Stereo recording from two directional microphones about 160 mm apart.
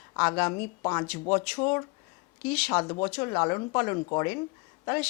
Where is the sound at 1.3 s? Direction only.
10° left (ahead or behind).